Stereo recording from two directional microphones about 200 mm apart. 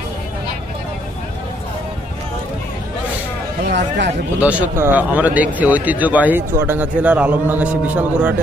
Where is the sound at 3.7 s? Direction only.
60° right (ahead or behind).